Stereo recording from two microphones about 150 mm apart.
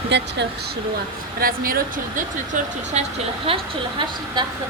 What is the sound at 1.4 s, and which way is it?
Speech, 75° right (ahead or behind).